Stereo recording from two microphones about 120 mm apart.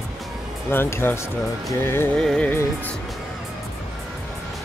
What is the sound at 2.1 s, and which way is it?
Music, 5° left (ahead or behind).